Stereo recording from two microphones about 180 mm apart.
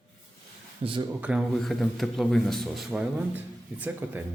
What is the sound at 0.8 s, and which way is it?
Speech, 35° right (ahead or behind).